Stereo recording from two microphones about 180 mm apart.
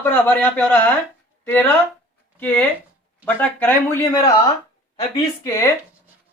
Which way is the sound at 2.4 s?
10° left (ahead or behind).